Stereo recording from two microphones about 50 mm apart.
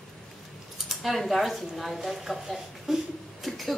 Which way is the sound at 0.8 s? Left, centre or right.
Centre.